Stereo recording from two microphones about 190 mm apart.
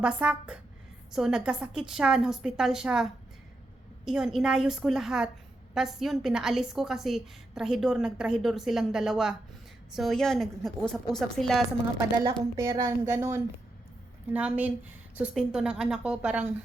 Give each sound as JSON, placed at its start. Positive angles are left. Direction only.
{"t": 0.0, "sound": "a woman's voice", "side_deg": -5}
{"t": 11.9, "sound": "a woman's voice", "side_deg": -20}